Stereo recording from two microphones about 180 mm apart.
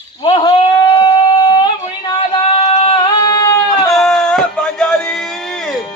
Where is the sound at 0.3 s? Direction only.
25° left (ahead or behind).